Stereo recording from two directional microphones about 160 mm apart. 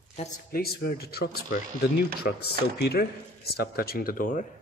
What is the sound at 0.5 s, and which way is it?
Speech, 75° left (ahead or behind).